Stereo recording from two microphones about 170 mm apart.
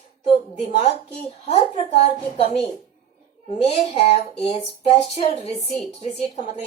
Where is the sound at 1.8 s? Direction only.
35° left (ahead or behind).